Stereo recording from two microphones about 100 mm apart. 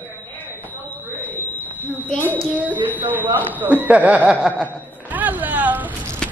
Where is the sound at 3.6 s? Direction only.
15° right (ahead or behind).